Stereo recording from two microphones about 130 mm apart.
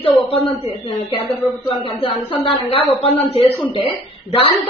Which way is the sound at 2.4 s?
45° left (ahead or behind).